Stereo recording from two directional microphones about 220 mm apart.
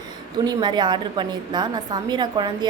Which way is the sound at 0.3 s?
20° right (ahead or behind).